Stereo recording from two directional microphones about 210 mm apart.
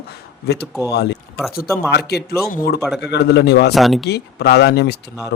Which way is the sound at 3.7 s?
Centre (ahead or behind).